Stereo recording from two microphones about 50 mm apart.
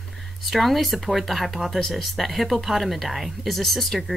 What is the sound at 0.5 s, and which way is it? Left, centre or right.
Speech, centre.